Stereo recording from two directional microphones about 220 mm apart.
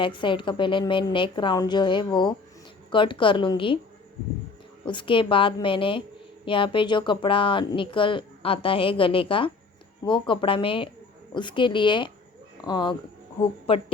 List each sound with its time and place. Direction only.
0.0 s speech: 20° left (ahead or behind)
4.9 s speech: 20° left (ahead or behind)